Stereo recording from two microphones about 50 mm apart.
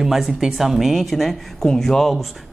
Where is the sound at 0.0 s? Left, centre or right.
Centre.